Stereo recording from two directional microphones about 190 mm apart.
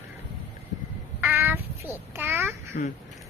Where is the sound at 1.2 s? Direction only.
10° right (ahead or behind).